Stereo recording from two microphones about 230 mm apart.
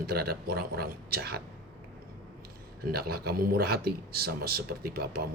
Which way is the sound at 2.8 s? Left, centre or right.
Right.